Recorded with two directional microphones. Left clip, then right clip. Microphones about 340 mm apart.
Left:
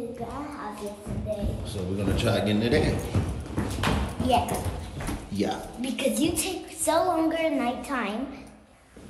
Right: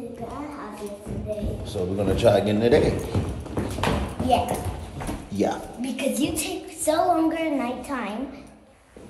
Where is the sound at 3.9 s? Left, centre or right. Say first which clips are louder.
Right 3 dB; centre.